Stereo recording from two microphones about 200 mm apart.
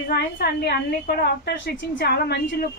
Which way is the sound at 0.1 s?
55° left (ahead or behind).